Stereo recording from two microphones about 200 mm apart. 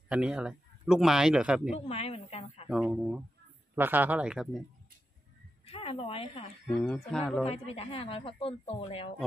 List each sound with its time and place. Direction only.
0.1 s speech: 5° right (ahead or behind)
1.9 s speech: 30° left (ahead or behind)
2.7 s speech: 5° right (ahead or behind)
5.7 s speech: 30° left (ahead or behind)
6.8 s speech: 5° left (ahead or behind)
7.4 s speech: 30° left (ahead or behind)